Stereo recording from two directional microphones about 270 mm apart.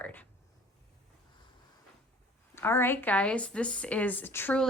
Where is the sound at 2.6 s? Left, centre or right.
Centre.